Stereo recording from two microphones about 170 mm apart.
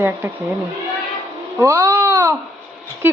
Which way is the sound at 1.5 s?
15° right (ahead or behind).